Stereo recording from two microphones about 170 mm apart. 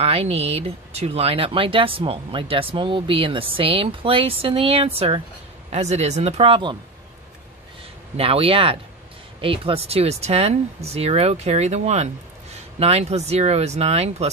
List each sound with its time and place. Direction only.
0.0 s speech: 35° right (ahead or behind)
8.2 s speech: 35° right (ahead or behind)